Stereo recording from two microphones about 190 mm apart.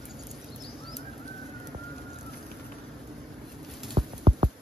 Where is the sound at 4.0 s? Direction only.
25° right (ahead or behind).